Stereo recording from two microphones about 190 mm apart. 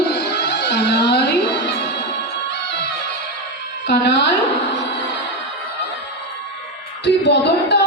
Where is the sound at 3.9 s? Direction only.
65° left (ahead or behind).